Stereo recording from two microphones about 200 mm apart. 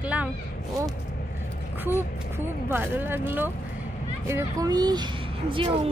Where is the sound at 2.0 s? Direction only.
10° right (ahead or behind); by 5.9 s 25° right (ahead or behind).